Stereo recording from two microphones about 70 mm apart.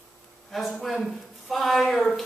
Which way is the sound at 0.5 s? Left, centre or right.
Centre.